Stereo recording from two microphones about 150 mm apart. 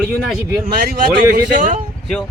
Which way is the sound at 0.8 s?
80° right.